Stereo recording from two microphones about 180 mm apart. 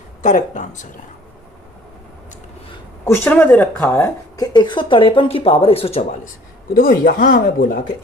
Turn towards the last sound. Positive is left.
turn(degrees=50)  # may be behind; listen again after turning